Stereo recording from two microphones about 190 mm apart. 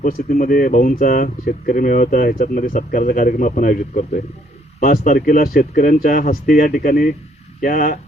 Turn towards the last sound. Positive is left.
turn(degrees=45)  # may be behind; listen again after turning